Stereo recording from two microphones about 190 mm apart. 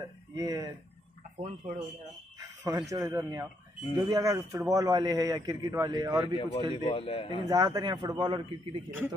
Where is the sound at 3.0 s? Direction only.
20° right (ahead or behind).